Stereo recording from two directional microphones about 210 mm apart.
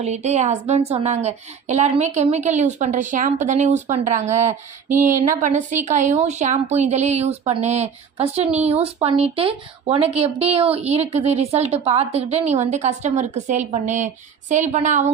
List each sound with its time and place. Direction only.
0.0 s a woman's voice: 30° right (ahead or behind)